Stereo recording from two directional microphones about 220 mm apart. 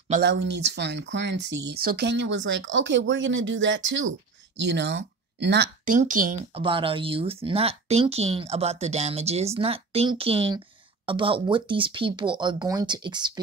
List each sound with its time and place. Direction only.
0.2 s speech: 55° right (ahead or behind)
5.9 s speech: 35° right (ahead or behind)
6.5 s speech: 25° right (ahead or behind)